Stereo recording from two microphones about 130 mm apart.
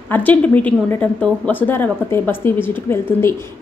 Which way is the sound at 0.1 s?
10° left (ahead or behind).